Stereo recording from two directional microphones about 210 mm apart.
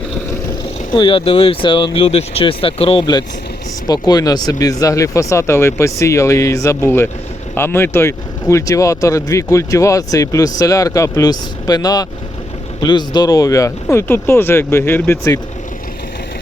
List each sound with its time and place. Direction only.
0.9 s speech: 25° left (ahead or behind)